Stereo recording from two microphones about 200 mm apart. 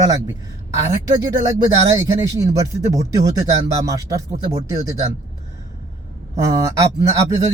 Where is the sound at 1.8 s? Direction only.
15° right (ahead or behind).